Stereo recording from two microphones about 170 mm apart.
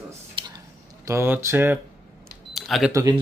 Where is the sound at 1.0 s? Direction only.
15° right (ahead or behind).